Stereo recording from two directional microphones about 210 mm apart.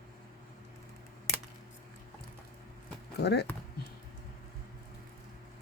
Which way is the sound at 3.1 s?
50° left (ahead or behind).